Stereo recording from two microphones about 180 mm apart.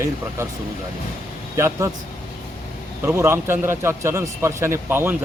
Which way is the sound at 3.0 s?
15° right (ahead or behind).